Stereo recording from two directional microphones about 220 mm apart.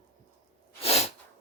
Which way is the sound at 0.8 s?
25° left (ahead or behind).